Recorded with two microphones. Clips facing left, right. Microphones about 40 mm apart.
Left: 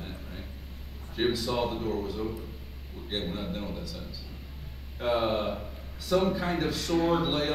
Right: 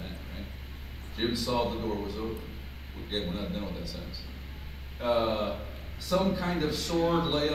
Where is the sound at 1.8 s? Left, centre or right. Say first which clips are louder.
Left 1 dB; centre.